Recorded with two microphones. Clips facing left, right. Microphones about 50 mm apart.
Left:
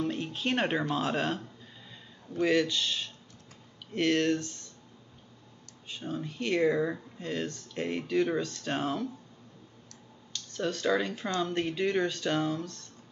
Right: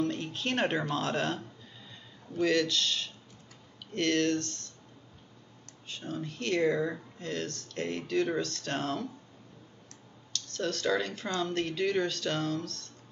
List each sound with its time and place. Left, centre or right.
0.0 s speech: centre
5.9 s speech: centre
10.3 s speech: centre